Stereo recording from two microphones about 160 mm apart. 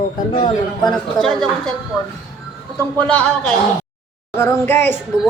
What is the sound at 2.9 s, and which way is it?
A woman's voice, 10° left (ahead or behind).